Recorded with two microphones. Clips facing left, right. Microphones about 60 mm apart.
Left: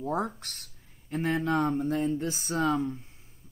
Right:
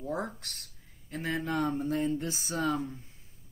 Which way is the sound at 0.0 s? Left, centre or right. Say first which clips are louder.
Left 4 dB; left.